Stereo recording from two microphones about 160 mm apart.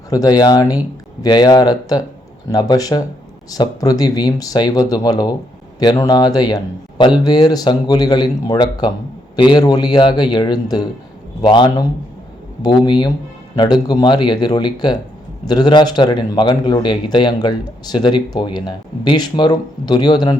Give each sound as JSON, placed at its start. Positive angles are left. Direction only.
{"t": 0.1, "sound": "a man's voice", "side_deg": 25}